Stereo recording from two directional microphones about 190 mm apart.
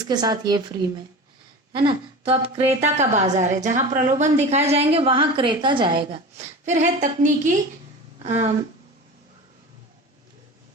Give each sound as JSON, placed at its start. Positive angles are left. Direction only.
{"t": 0.0, "sound": "a woman's voice", "side_deg": -20}
{"t": 6.7, "sound": "a woman's voice", "side_deg": -40}